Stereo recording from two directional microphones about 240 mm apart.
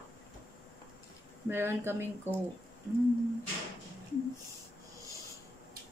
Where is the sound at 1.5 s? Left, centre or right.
Centre.